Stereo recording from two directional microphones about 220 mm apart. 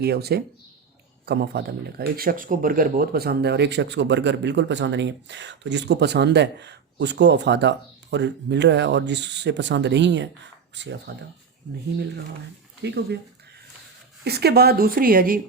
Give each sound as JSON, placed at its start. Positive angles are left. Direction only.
{"t": 0.0, "sound": "speech", "side_deg": -45}
{"t": 12.8, "sound": "speech", "side_deg": -50}
{"t": 14.3, "sound": "speech", "side_deg": -45}